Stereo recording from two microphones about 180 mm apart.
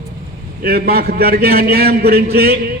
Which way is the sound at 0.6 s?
60° right (ahead or behind).